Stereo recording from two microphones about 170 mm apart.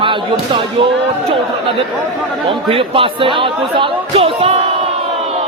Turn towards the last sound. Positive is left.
turn(degrees=-35)  # may be behind; listen again after turning